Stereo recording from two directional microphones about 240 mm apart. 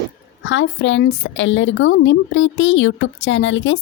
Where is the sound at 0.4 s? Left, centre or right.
Left.